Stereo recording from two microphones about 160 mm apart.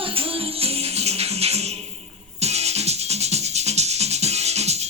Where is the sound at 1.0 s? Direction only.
40° right (ahead or behind).